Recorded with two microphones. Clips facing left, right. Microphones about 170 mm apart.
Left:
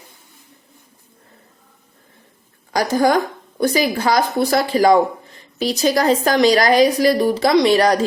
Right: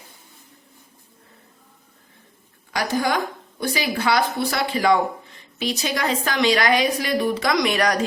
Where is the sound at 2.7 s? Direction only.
40° left (ahead or behind).